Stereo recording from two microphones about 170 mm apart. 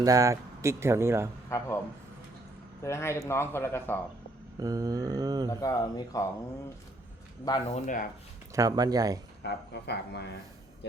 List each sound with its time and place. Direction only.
0.0 s speech: 20° right (ahead or behind)
1.5 s speech: 15° left (ahead or behind)
2.8 s speech: 15° left (ahead or behind)
4.6 s mantra: 20° right (ahead or behind)
5.5 s speech: 20° left (ahead or behind)
7.7 s speech: 50° left (ahead or behind)
8.5 s mantra: 20° right (ahead or behind)
9.4 s speech: 80° left